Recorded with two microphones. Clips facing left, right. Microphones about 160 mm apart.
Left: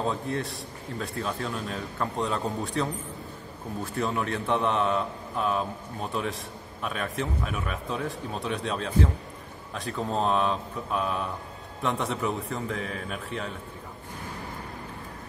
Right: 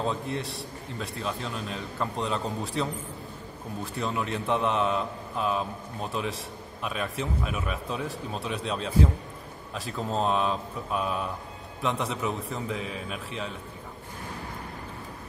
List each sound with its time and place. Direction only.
0.0 s a man's voice: centre (ahead or behind)